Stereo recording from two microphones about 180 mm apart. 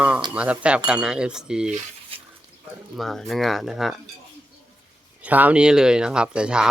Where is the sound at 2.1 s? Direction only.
30° right (ahead or behind).